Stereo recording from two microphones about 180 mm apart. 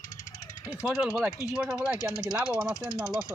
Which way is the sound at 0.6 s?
5° right (ahead or behind).